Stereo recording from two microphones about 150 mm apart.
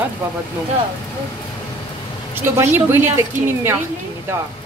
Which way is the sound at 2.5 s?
15° right (ahead or behind).